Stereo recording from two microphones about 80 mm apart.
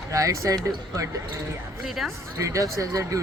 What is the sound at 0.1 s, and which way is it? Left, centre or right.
Speech, right.